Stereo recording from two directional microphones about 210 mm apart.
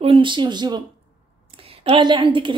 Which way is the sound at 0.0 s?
25° right (ahead or behind).